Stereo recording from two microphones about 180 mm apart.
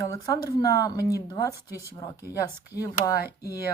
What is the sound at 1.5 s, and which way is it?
Speech, 15° right (ahead or behind).